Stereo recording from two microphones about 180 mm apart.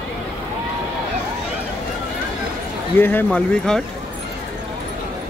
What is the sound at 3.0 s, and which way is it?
Speech, 10° left (ahead or behind).